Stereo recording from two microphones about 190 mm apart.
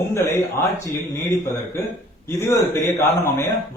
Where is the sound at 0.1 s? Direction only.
15° left (ahead or behind).